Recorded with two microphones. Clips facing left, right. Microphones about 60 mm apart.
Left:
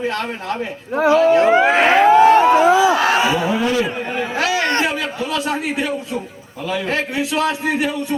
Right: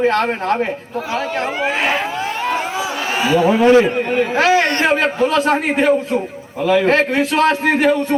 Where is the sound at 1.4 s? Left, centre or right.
Left.